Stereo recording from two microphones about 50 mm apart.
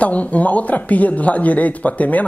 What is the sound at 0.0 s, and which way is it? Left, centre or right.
Speech, left.